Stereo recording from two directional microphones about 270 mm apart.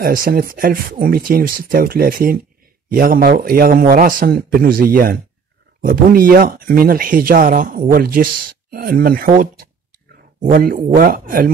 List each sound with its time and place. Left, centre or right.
0.0 s speech: right